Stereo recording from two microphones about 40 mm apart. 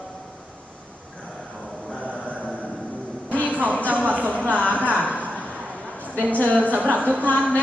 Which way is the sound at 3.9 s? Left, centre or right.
Right.